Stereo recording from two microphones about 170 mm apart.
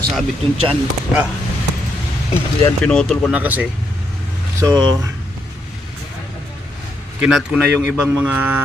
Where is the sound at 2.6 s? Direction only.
10° left (ahead or behind); by 3.7 s 10° right (ahead or behind).